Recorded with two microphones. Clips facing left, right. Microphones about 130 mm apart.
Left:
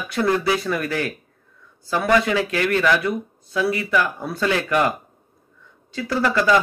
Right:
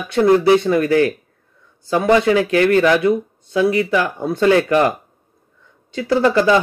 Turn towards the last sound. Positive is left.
turn(degrees=-30)  # may be behind; listen again after turning